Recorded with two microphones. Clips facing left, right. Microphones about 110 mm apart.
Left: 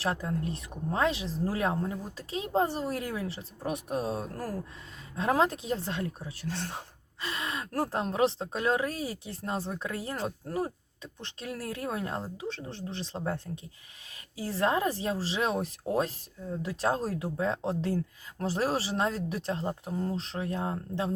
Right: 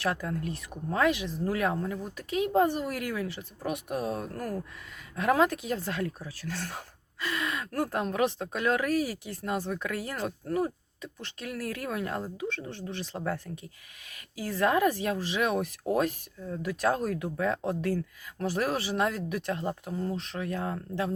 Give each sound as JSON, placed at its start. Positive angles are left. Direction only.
{"t": 0.0, "sound": "speech", "side_deg": 25}